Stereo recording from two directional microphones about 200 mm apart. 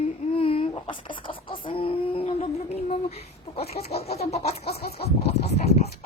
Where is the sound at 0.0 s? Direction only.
30° left (ahead or behind).